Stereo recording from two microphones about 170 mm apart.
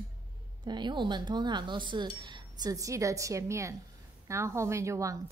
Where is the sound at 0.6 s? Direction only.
25° right (ahead or behind).